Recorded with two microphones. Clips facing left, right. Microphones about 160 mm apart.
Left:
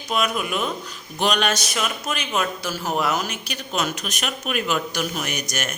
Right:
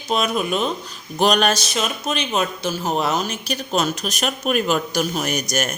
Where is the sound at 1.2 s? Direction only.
40° right (ahead or behind).